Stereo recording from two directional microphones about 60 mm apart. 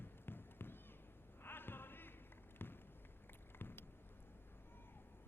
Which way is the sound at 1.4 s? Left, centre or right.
Left.